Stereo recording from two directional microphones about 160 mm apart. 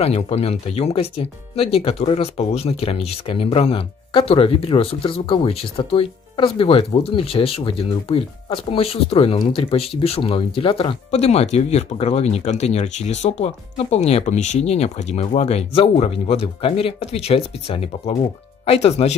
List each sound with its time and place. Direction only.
0.0 s speech: 40° left (ahead or behind)